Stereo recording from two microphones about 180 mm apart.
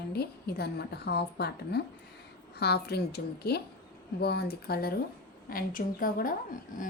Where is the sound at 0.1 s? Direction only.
60° left (ahead or behind).